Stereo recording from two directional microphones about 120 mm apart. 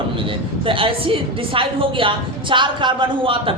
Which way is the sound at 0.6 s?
50° right (ahead or behind).